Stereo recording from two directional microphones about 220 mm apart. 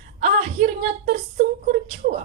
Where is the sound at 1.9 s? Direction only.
35° right (ahead or behind).